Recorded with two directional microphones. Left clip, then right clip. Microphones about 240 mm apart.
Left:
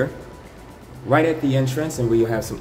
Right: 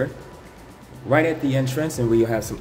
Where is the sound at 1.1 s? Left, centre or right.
Centre.